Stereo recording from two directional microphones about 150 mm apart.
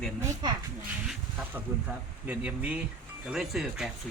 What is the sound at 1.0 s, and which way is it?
Speech, 10° right (ahead or behind).